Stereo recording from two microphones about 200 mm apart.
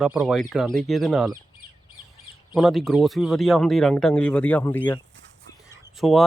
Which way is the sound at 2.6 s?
Centre (ahead or behind).